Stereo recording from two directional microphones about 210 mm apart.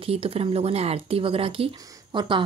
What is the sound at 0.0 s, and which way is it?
Speech, 25° right (ahead or behind).